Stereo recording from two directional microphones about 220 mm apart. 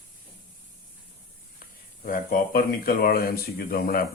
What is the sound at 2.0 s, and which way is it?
Speech, 40° left (ahead or behind).